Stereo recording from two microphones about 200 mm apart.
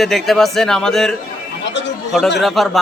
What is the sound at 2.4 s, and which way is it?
Speech, centre (ahead or behind).